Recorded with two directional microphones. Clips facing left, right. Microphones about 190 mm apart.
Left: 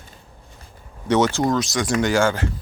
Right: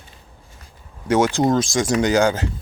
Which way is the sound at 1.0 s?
10° right (ahead or behind).